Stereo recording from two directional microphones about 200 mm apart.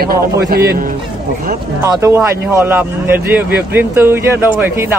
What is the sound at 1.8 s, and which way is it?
Speech, 15° right (ahead or behind).